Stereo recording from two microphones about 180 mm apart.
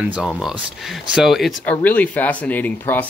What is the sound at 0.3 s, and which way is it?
Speech, centre (ahead or behind).